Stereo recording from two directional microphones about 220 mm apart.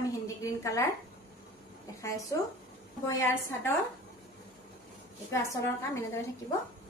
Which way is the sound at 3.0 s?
10° left (ahead or behind).